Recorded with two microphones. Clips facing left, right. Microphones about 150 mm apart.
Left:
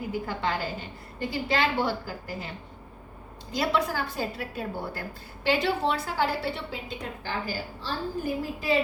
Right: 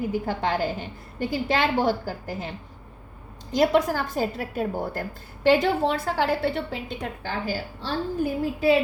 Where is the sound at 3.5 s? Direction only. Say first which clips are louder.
Right 6 dB; 45° right (ahead or behind).